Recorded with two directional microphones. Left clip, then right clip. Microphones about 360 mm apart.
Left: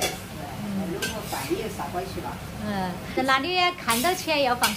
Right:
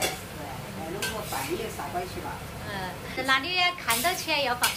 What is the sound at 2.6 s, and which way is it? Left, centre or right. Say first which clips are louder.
A woman's voice: left 5 dB; centre.